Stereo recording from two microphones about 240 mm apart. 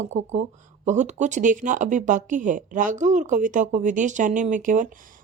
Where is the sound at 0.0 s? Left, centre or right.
Right.